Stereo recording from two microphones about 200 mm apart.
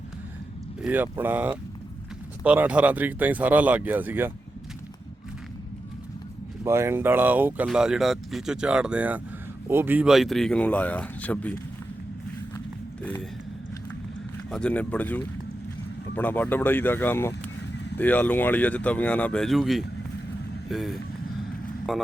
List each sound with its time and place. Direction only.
0.8 s speech: 10° right (ahead or behind)
6.7 s speech: 10° right (ahead or behind); by 11.6 s 5° left (ahead or behind)
12.5 s a sound: 10° left (ahead or behind)
14.5 s speech: 5° left (ahead or behind)